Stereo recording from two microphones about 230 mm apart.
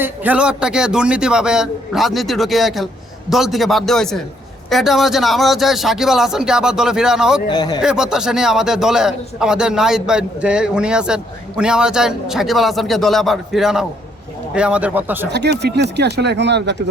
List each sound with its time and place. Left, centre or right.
0.0 s a man's voice: centre
7.5 s speech: centre
7.8 s a man's voice: centre
15.3 s speech: right